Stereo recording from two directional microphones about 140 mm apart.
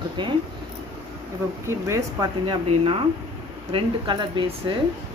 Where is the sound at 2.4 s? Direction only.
40° right (ahead or behind).